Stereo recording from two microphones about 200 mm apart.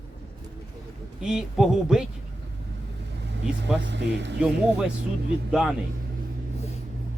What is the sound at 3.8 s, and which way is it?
Speech, 60° right (ahead or behind).